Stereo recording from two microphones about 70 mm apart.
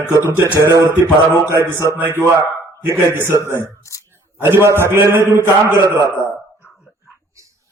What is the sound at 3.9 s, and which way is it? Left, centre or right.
Speech, left.